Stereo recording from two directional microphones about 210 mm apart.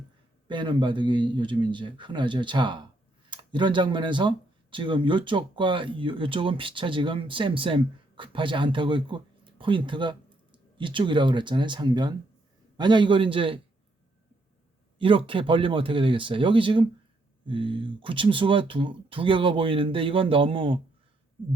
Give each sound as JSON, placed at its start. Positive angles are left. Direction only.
{"t": 0.4, "sound": "speech", "side_deg": -20}
{"t": 14.9, "sound": "speech", "side_deg": -25}